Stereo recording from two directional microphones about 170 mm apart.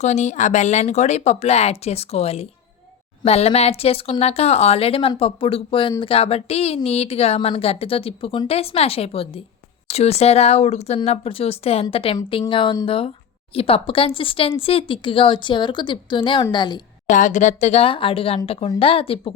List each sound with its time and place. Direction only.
0.0 s a woman's voice: 40° left (ahead or behind); by 16.8 s 25° left (ahead or behind)
17.1 s a woman's voice: 45° left (ahead or behind)